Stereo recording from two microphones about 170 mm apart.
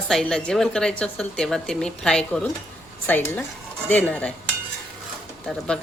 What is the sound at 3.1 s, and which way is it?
Dishes, 10° left (ahead or behind).